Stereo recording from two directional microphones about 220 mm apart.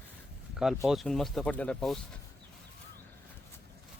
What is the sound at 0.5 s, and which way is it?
Speech, centre (ahead or behind).